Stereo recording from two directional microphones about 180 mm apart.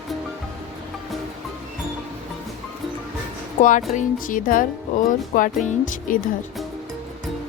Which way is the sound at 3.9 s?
50° left (ahead or behind).